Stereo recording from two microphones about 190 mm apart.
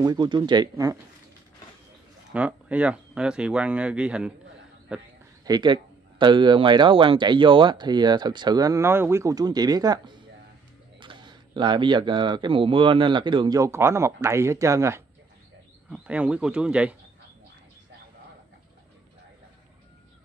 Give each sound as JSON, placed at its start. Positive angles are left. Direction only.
{"t": 0.0, "sound": "speech", "side_deg": -20}
{"t": 2.3, "sound": "speech", "side_deg": -5}
{"t": 5.4, "sound": "speech", "side_deg": -20}